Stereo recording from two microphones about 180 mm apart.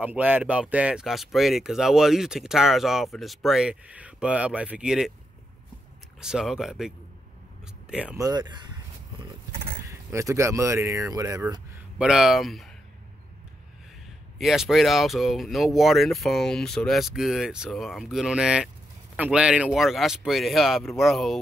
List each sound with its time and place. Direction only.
0.0 s speech: 10° right (ahead or behind)
6.2 s speech: 5° right (ahead or behind)
8.2 s speech: 20° right (ahead or behind)
12.0 s speech: 5° right (ahead or behind)
14.4 s speech: centre (ahead or behind)